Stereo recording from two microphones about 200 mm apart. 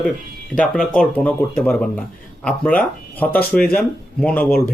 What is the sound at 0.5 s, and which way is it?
Speech, 5° left (ahead or behind).